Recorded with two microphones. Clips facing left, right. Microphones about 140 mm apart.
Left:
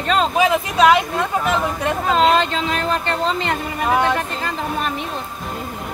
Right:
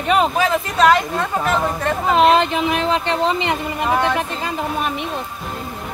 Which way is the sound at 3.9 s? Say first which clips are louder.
Left 1 dB; centre (ahead or behind).